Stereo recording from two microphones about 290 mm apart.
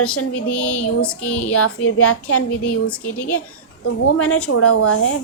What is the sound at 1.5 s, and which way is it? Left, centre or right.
A woman's voice, left.